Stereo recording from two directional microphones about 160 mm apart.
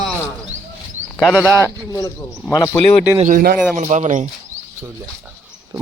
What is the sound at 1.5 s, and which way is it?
Speech, 15° right (ahead or behind).